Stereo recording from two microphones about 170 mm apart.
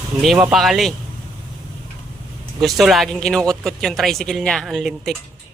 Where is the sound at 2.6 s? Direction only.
Centre (ahead or behind).